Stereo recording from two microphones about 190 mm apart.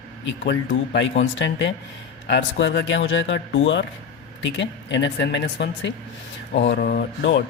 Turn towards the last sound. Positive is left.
turn(degrees=60)  # may be behind; listen again after turning